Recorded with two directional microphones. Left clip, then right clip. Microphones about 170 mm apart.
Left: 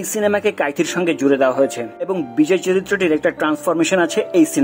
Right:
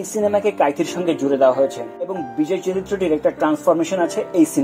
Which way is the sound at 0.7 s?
25° left (ahead or behind).